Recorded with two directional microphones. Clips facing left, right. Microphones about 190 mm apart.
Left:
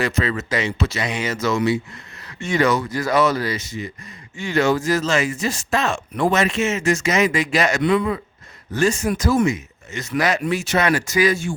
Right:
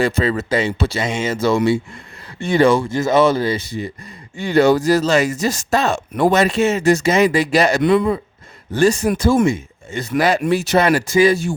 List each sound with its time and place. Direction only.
0.0 s speech: 30° right (ahead or behind)